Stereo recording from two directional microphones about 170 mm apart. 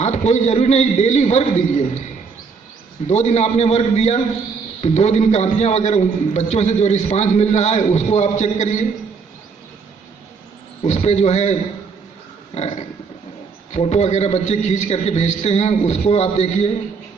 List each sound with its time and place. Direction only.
0.0 s a man's voice: 40° left (ahead or behind)
3.1 s a man's voice: 40° left (ahead or behind)
10.8 s a man's voice: 40° left (ahead or behind)
12.5 s a man's voice: 40° left (ahead or behind)